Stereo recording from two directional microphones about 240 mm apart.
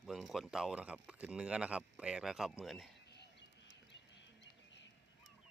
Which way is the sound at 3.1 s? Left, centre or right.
Left.